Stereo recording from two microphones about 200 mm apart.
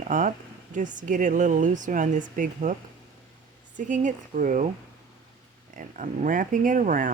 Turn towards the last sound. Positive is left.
turn(degrees=-40)  # may be behind; listen again after turning